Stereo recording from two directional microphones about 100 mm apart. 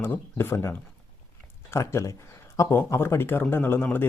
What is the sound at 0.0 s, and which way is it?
Speech, 20° left (ahead or behind).